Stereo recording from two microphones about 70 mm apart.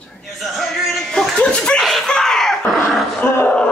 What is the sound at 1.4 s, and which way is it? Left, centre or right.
Chuckle, centre.